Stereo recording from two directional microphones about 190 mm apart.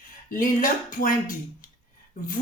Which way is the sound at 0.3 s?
45° left (ahead or behind).